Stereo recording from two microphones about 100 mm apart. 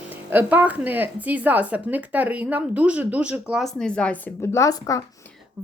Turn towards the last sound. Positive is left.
turn(degrees=35)  # may be behind; listen again after turning